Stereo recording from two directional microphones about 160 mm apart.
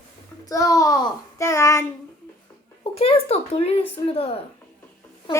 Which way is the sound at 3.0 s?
40° left (ahead or behind).